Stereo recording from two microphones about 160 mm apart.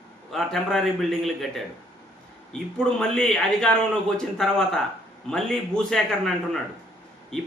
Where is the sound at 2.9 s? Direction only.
5° left (ahead or behind).